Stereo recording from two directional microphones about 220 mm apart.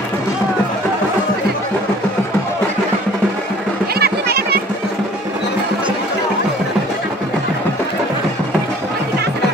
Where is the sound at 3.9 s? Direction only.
45° right (ahead or behind).